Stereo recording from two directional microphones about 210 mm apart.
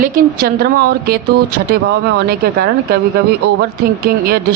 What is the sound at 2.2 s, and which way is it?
A woman's voice, 50° right (ahead or behind).